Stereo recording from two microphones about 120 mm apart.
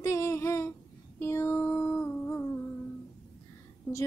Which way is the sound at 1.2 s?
20° left (ahead or behind).